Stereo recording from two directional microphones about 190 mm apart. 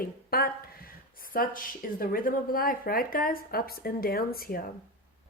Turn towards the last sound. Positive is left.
turn(degrees=50)  # may be behind; listen again after turning